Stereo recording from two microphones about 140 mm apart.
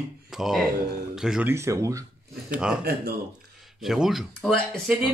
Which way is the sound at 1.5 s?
20° right (ahead or behind).